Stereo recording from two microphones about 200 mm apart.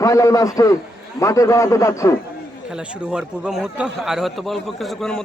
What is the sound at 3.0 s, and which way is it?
Speech, 5° right (ahead or behind).